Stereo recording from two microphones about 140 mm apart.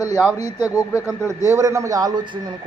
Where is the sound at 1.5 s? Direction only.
20° right (ahead or behind).